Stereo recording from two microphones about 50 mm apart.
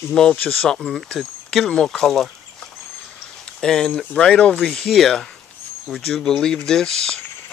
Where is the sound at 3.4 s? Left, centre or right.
Centre.